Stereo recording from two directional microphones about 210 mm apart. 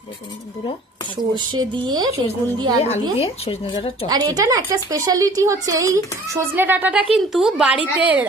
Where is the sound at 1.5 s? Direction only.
20° right (ahead or behind).